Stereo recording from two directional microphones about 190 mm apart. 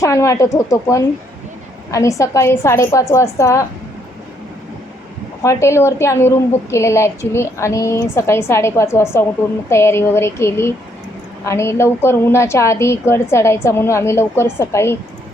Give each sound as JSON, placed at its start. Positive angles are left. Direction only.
{"t": 0.0, "sound": "a woman's voice", "side_deg": 15}
{"t": 5.4, "sound": "a woman's voice", "side_deg": 15}